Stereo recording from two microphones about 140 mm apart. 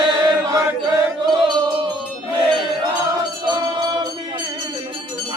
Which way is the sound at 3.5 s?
35° right (ahead or behind).